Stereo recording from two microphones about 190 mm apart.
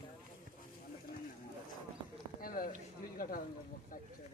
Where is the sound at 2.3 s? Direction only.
50° left (ahead or behind).